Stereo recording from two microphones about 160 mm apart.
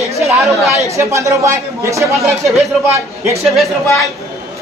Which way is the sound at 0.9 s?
20° right (ahead or behind).